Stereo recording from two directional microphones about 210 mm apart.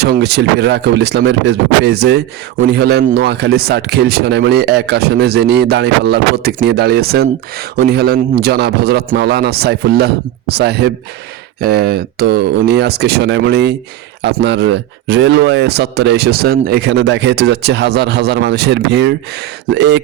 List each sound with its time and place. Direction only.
0.0 s speech: 50° right (ahead or behind)